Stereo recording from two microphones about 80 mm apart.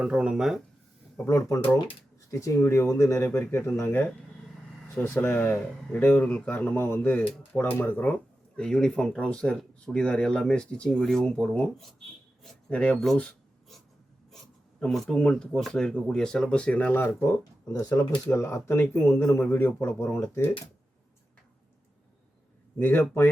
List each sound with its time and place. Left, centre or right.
0.0 s speech: centre
1.3 s speech: left
8.5 s speech: centre
14.8 s speech: centre
17.7 s speech: left
18.3 s speech: left
22.8 s speech: left